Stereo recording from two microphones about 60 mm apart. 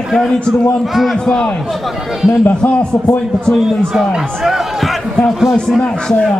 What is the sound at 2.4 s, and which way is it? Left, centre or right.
Speech, left.